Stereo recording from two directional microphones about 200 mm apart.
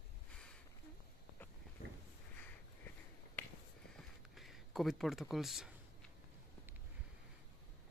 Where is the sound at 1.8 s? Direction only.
45° left (ahead or behind).